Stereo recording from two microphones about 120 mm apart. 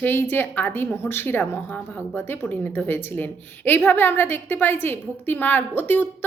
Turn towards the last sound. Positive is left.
turn(degrees=15)  # may be behind; listen again after turning